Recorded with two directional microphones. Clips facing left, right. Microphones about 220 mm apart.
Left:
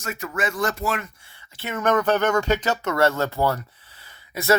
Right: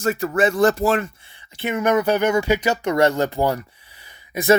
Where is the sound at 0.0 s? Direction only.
30° right (ahead or behind).